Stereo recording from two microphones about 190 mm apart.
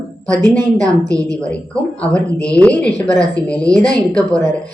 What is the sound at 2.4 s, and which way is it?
A woman's voice, 5° left (ahead or behind).